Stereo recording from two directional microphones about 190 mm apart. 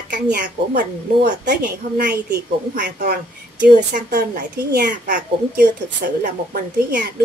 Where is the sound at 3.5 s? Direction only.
50° right (ahead or behind).